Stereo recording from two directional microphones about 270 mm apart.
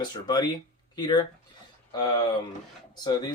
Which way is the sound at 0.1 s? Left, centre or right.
Centre.